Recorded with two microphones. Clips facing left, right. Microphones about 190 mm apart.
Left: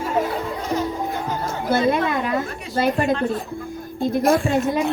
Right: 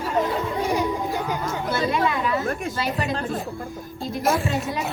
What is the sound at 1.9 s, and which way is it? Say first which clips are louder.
Chatter: left 2 dB; 50° left (ahead or behind).